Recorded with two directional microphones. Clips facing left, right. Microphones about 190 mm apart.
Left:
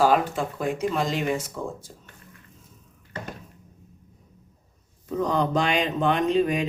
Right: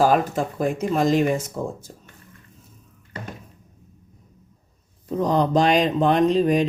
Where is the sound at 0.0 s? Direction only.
45° right (ahead or behind).